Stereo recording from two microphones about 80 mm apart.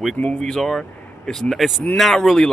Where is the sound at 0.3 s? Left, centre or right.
Centre.